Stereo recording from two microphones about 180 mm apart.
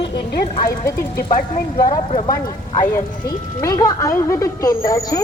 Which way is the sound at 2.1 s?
30° left (ahead or behind).